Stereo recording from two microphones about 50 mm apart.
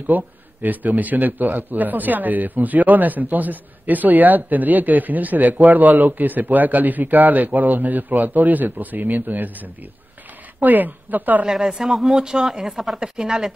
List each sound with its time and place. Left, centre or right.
0.0 s a man's voice: right
11.4 s speech: centre